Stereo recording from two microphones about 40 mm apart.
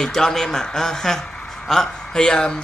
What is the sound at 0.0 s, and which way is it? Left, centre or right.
Speech, centre.